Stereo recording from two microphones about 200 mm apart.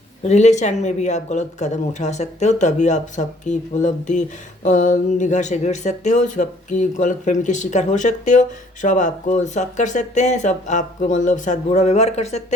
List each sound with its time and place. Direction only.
0.3 s speech: 35° left (ahead or behind)